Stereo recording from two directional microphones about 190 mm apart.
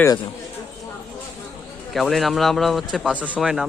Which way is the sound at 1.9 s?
Centre (ahead or behind).